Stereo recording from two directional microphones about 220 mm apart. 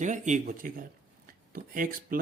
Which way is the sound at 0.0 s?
35° right (ahead or behind).